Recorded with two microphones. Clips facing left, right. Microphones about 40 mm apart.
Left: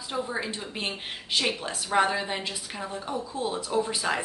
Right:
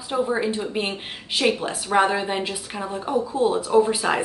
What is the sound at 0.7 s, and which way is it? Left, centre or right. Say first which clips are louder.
Speech: right 6 dB; centre.